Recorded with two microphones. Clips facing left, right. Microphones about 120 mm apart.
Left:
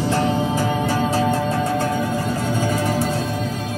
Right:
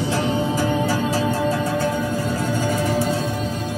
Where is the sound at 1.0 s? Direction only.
45° left (ahead or behind).